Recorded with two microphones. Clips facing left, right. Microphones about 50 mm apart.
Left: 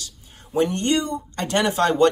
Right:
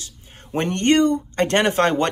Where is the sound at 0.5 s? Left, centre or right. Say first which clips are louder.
Right 2 dB; right.